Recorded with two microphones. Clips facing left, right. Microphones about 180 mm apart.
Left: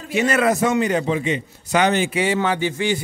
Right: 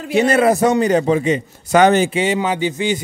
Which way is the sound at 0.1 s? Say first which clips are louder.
Right 5 dB; 30° right (ahead or behind).